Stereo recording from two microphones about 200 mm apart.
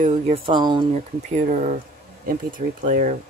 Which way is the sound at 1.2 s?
35° right (ahead or behind).